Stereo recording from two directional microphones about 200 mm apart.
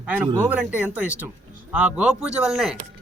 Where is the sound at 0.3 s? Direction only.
5° right (ahead or behind).